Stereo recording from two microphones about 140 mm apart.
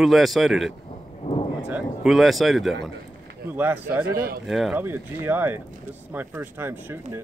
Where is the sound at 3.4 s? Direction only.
15° right (ahead or behind).